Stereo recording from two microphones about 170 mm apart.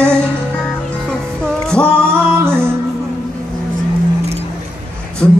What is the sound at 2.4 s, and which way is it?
Music, 15° right (ahead or behind).